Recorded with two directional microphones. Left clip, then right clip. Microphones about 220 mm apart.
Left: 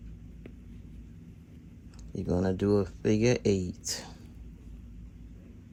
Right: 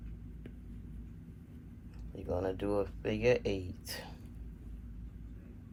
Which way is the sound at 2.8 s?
35° left (ahead or behind).